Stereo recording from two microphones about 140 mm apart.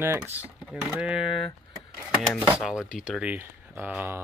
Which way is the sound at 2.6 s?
5° right (ahead or behind).